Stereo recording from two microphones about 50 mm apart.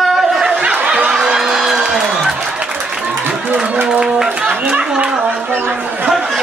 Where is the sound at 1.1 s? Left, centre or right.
Centre.